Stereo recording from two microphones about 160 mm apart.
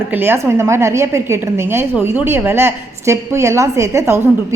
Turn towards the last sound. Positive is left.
turn(degrees=-15)  # may be behind; listen again after turning